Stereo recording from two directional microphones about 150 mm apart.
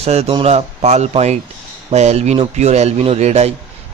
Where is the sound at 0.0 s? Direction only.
45° right (ahead or behind).